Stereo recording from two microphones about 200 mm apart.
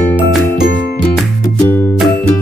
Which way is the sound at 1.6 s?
10° left (ahead or behind).